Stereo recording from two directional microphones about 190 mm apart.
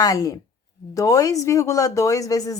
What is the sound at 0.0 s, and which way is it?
Speech, 20° left (ahead or behind).